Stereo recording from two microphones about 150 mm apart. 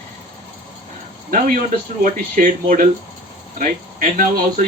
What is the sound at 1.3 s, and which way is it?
Speech, 65° right (ahead or behind).